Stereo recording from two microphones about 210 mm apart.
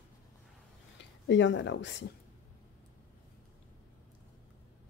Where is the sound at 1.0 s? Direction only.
55° left (ahead or behind).